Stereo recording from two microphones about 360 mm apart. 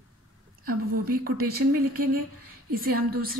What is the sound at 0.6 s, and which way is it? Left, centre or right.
A woman's voice, right.